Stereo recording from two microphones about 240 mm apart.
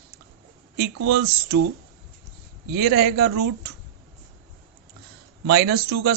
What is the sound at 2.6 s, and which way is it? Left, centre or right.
Speech, right.